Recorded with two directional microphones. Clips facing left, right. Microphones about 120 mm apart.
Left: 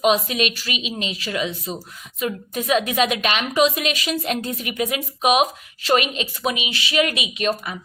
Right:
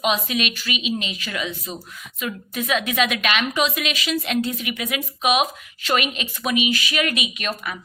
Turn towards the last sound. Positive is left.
turn(degrees=30)  # may be behind; listen again after turning